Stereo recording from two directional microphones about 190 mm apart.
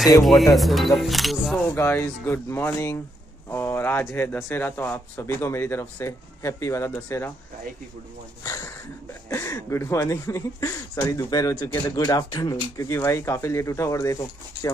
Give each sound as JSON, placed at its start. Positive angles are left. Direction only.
{"t": 0.6, "sound": "speech", "side_deg": 0}
{"t": 1.7, "sound": "speech", "side_deg": 15}
{"t": 9.3, "sound": "speech", "side_deg": 15}